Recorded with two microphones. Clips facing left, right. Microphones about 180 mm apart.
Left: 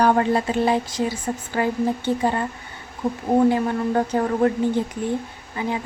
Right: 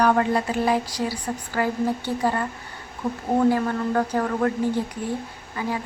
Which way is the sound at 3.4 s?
20° left (ahead or behind).